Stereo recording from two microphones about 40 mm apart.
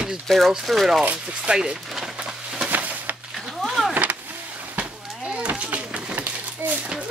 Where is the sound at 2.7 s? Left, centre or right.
Right.